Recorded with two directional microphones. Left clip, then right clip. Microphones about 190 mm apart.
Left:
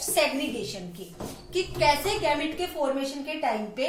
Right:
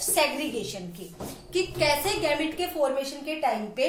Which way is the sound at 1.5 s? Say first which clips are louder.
Left 1 dB; 35° right (ahead or behind).